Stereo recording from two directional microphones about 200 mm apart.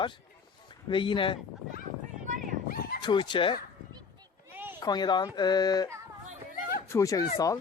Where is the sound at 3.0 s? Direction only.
25° left (ahead or behind).